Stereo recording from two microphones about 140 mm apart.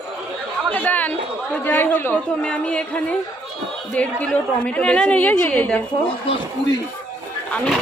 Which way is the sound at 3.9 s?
10° left (ahead or behind).